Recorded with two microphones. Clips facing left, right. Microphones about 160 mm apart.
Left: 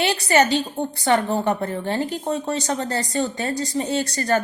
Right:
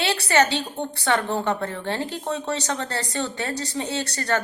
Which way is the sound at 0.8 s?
10° left (ahead or behind).